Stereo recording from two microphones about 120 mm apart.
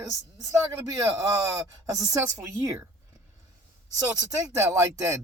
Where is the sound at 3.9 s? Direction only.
30° right (ahead or behind).